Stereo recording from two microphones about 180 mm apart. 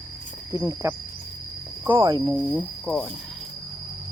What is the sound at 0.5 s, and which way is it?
Speech, 15° right (ahead or behind).